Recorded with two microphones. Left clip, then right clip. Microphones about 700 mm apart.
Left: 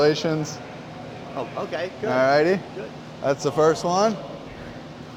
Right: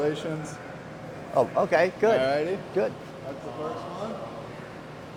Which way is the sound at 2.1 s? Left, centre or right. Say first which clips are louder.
Left 6 dB; left.